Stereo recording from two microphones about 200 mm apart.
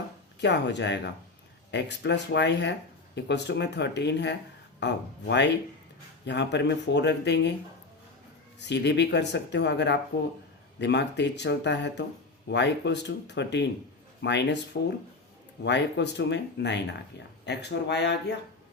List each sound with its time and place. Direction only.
0.3 s speech: 60° left (ahead or behind)
8.5 s speech: 60° left (ahead or behind)